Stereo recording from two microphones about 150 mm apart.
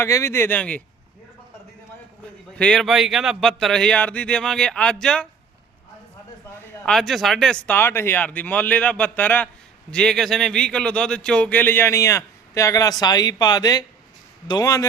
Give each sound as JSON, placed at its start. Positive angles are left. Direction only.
{"t": 0.0, "sound": "speech", "side_deg": 20}
{"t": 2.6, "sound": "speech", "side_deg": 5}
{"t": 6.8, "sound": "speech", "side_deg": 5}